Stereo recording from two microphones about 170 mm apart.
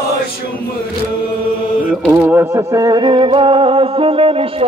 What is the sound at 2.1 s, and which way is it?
Music, 15° right (ahead or behind).